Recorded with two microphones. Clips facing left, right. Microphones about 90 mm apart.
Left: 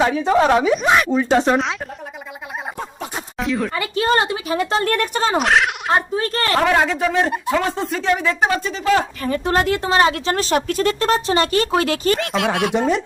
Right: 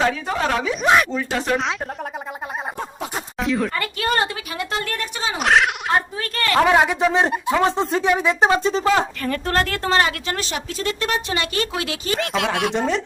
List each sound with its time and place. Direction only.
0.1 s a woman's voice: 25° left (ahead or behind)
0.8 s speech: centre (ahead or behind)
1.1 s a woman's voice: 20° left (ahead or behind)
3.4 s a woman's voice: centre (ahead or behind)
3.9 s a woman's voice: 25° left (ahead or behind)
4.5 s speech: 35° left (ahead or behind)
4.9 s speech: 50° left (ahead or behind)
5.4 s speech: centre (ahead or behind)
6.1 s speech: 30° left (ahead or behind)
6.7 s speech: 15° right (ahead or behind)
8.7 s speech: 35° right (ahead or behind)
9.2 s speech: 15° left (ahead or behind)
10.5 s speech: 50° left (ahead or behind)
12.1 s speech: centre (ahead or behind)